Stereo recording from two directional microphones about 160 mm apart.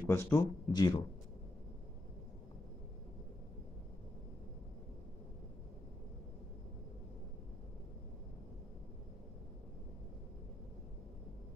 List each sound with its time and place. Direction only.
0.0 s speech: 20° left (ahead or behind)